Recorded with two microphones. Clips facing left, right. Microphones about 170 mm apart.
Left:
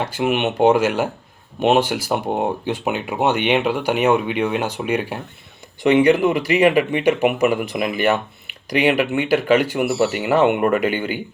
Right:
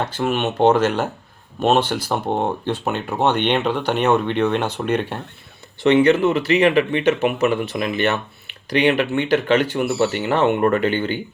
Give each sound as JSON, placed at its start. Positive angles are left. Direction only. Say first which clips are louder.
{"t": 0.0, "sound": "speech", "louder": "left 1 dB", "side_deg": 10}